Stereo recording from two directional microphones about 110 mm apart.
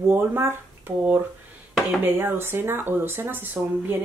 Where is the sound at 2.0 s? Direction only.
20° right (ahead or behind).